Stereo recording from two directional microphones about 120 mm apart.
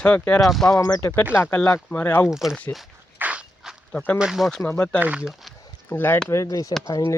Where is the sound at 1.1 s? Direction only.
15° left (ahead or behind).